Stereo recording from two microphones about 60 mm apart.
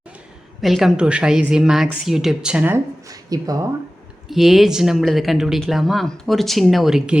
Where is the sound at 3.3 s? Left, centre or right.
Right.